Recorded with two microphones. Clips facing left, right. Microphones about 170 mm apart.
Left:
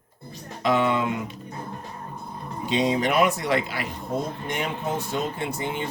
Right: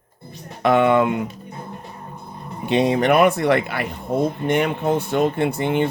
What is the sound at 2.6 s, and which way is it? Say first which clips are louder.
Speech: right 6 dB; 60° right (ahead or behind).